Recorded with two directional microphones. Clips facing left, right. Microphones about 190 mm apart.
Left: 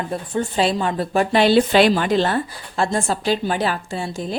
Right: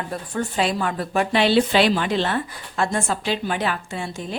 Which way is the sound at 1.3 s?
45° left (ahead or behind).